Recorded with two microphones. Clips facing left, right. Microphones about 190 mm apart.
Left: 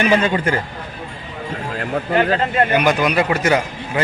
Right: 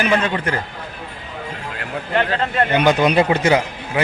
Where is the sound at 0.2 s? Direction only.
5° left (ahead or behind).